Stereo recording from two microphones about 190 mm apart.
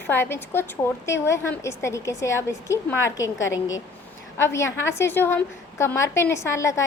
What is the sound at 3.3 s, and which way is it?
Speech, 85° left.